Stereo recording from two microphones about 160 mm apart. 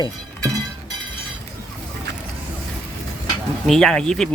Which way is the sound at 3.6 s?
5° left (ahead or behind).